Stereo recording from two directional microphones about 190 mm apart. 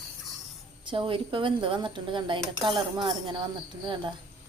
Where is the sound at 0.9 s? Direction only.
25° right (ahead or behind).